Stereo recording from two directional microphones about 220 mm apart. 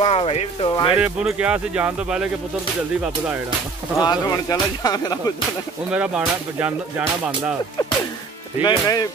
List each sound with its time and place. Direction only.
0.0 s speech: 25° left (ahead or behind)
0.9 s speech: 5° right (ahead or behind)
4.0 s speech: 15° left (ahead or behind)
5.9 s speech: 5° right (ahead or behind)
8.6 s speech: 15° left (ahead or behind)